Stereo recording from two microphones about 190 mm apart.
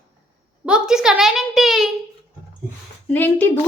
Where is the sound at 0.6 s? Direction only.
5° right (ahead or behind).